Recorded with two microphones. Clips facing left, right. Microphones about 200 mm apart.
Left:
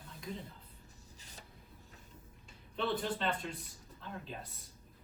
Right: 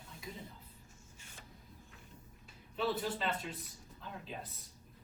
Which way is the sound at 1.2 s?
40° left (ahead or behind).